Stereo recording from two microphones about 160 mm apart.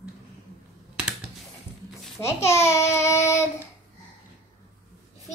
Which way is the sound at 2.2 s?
15° left (ahead or behind).